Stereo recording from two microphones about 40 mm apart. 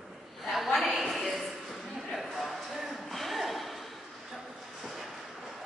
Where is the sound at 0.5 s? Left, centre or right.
Centre.